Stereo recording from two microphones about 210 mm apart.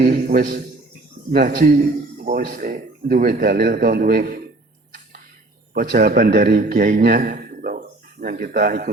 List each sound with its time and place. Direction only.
0.1 s a man's voice: 40° right (ahead or behind)
5.7 s a man's voice: 45° right (ahead or behind)